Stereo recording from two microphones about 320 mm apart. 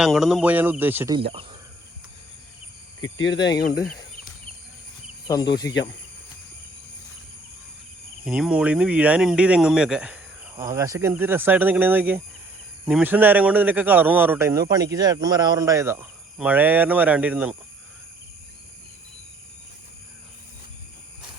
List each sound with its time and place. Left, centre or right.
0.0 s a man's voice: centre
3.0 s speech: left
8.2 s a man's voice: centre